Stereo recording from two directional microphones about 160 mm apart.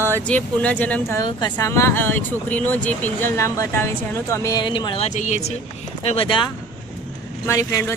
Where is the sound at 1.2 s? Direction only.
25° left (ahead or behind).